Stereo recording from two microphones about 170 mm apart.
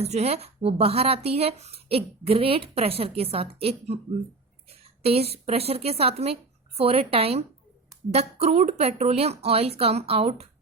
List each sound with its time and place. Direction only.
0.0 s speech: 40° right (ahead or behind)
5.0 s speech: 35° right (ahead or behind)